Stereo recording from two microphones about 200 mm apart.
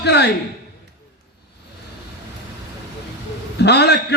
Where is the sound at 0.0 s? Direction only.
55° left (ahead or behind).